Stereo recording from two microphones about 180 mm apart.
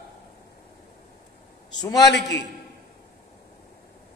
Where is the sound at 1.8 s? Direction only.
20° left (ahead or behind).